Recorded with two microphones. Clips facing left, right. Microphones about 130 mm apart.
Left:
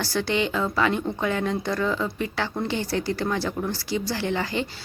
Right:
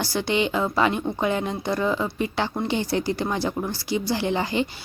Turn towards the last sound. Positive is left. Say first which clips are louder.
# right 3 dB
turn(degrees=-20)  # may be behind; listen again after turning